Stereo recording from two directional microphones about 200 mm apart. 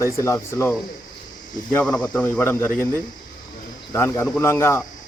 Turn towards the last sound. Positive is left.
turn(degrees=10)  # may be behind; listen again after turning